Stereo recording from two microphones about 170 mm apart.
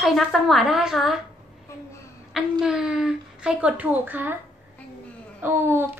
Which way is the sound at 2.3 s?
5° right (ahead or behind).